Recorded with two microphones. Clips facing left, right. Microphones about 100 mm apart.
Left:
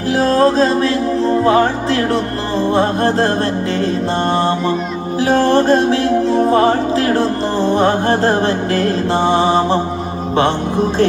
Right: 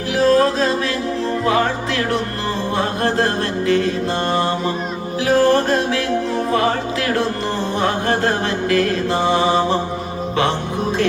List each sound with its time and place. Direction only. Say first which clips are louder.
0.2 s music: left 2 dB; 35° left (ahead or behind)